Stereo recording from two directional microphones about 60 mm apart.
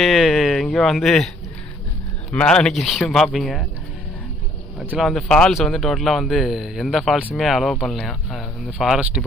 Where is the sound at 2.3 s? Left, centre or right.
Centre.